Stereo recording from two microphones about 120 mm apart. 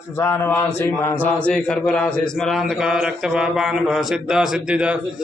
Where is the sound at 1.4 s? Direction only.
5° left (ahead or behind).